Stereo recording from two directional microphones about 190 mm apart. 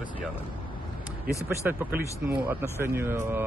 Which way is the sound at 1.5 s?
10° right (ahead or behind).